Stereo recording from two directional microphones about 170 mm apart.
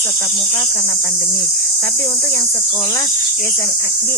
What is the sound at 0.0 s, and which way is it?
Cricket, 15° left (ahead or behind).